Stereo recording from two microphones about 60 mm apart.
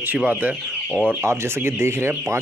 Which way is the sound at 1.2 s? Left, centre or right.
Right.